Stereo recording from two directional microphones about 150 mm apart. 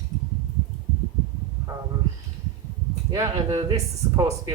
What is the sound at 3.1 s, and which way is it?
Speech, 25° right (ahead or behind).